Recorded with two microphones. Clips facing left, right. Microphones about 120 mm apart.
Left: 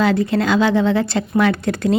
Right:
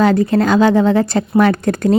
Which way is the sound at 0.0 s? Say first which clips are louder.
Right 4 dB; 40° right (ahead or behind).